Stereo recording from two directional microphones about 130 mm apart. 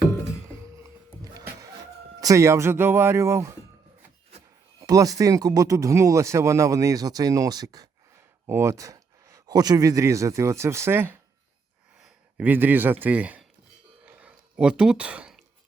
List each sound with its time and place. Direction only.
1.2 s music: 30° right (ahead or behind)
2.2 s speech: 20° right (ahead or behind)
4.8 s speech: 25° right (ahead or behind)
14.0 s a sound: 15° right (ahead or behind)